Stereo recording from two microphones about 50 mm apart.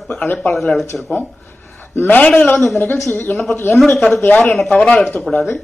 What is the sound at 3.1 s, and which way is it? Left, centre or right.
Speech, left.